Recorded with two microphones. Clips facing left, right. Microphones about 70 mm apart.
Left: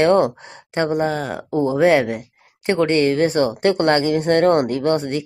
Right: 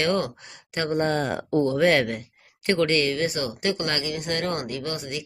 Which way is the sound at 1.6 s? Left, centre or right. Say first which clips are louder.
Left 7 dB; centre.